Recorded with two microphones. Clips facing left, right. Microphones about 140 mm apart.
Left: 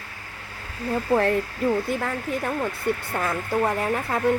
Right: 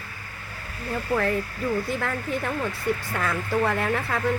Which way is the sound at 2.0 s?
15° left (ahead or behind).